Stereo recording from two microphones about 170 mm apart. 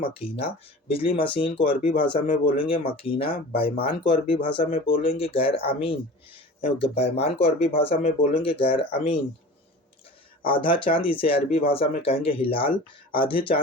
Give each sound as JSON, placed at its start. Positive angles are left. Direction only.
{"t": 0.3, "sound": "speech", "side_deg": 35}
{"t": 10.4, "sound": "speech", "side_deg": 30}